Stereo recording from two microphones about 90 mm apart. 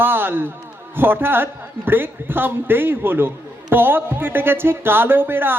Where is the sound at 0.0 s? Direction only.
25° right (ahead or behind).